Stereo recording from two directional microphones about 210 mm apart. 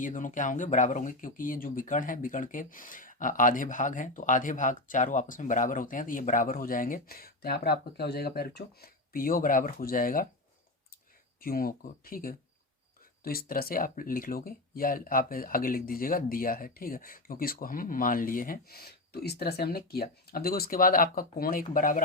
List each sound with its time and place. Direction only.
0.0 s speech: 40° left (ahead or behind)
11.3 s speech: 45° left (ahead or behind)